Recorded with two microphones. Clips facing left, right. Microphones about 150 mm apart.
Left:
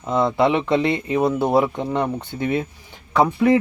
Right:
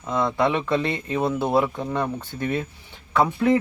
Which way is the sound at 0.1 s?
25° left (ahead or behind).